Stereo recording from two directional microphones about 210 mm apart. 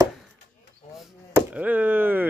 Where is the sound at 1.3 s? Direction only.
5° right (ahead or behind).